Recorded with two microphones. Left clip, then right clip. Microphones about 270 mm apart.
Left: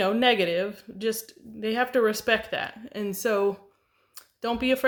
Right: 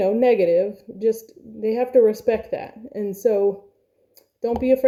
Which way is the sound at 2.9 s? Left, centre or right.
Left.